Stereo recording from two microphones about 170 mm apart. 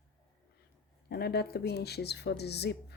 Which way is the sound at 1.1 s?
70° left (ahead or behind).